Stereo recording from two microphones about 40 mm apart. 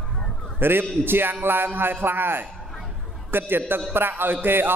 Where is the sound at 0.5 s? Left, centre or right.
Right.